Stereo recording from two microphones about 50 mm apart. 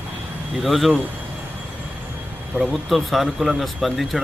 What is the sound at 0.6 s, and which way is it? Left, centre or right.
Speech, centre.